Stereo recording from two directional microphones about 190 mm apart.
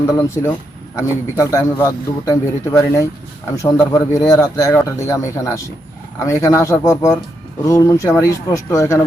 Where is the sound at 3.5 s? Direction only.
15° left (ahead or behind).